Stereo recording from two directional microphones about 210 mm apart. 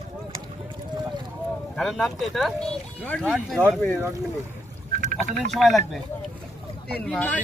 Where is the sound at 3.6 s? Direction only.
5° left (ahead or behind).